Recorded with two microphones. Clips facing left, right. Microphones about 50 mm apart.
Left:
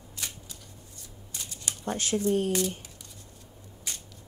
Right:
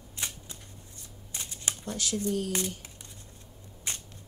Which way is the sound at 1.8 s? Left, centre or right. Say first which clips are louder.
Left 5 dB; left.